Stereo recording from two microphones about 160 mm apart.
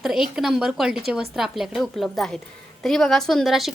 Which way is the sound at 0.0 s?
5° right (ahead or behind).